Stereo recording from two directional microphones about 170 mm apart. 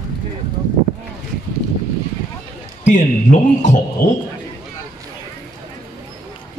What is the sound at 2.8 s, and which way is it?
A man's voice, 45° left (ahead or behind).